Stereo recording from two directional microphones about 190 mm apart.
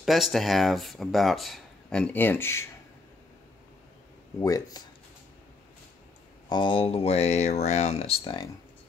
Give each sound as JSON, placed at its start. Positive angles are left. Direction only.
{"t": 0.0, "sound": "speech", "side_deg": 0}
{"t": 4.4, "sound": "speech", "side_deg": 15}
{"t": 6.5, "sound": "speech", "side_deg": 25}